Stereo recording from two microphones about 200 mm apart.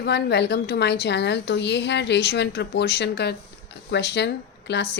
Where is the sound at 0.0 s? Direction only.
55° left (ahead or behind).